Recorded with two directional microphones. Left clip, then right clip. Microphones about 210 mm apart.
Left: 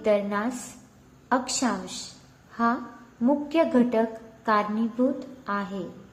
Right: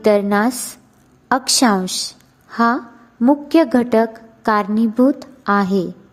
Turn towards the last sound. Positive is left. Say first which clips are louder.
# right 13 dB
turn(degrees=-55)  # may be behind; listen again after turning